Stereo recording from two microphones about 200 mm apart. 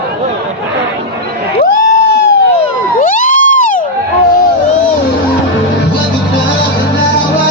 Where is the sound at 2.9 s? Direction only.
40° left (ahead or behind).